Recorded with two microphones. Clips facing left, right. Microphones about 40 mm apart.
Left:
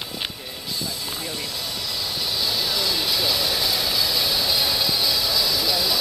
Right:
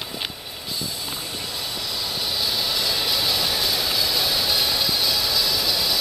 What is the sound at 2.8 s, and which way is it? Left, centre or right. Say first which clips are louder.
Vehicle: even; centre.